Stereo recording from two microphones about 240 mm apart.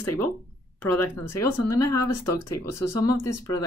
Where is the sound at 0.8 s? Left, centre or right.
Centre.